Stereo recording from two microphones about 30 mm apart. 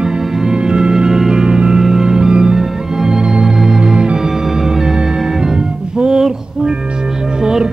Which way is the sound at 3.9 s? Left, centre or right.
Right.